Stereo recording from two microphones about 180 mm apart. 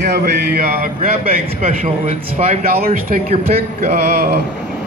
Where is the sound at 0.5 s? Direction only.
50° right (ahead or behind).